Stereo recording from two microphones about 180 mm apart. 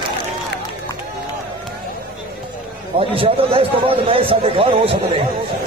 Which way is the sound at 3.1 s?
30° right (ahead or behind).